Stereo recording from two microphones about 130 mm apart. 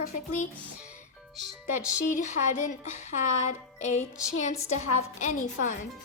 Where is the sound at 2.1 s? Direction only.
65° left (ahead or behind).